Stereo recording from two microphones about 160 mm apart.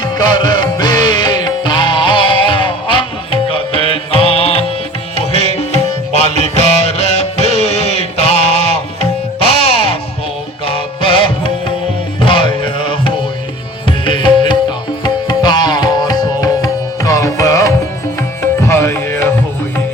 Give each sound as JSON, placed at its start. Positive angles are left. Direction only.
{"t": 0.0, "sound": "music", "side_deg": 25}
{"t": 5.1, "sound": "tabla", "side_deg": 40}
{"t": 10.7, "sound": "music", "side_deg": 35}